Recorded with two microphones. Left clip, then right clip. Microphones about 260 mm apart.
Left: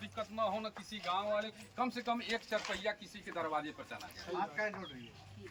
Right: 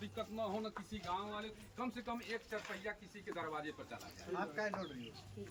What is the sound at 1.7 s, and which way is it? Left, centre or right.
Speech, centre.